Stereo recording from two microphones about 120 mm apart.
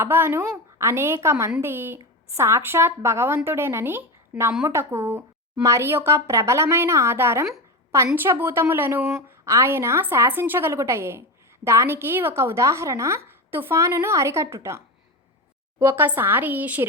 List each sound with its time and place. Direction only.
0.0 s a woman's voice: 20° right (ahead or behind)